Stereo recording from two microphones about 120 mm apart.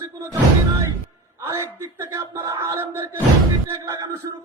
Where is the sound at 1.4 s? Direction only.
25° right (ahead or behind).